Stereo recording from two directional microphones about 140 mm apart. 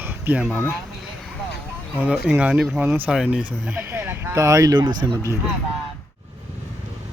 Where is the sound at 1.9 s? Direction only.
10° right (ahead or behind).